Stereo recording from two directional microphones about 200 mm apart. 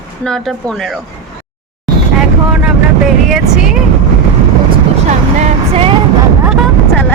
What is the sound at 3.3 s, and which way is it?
Speech, centre (ahead or behind).